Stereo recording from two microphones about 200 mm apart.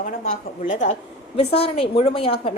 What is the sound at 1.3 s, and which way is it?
A woman's voice, 30° left (ahead or behind).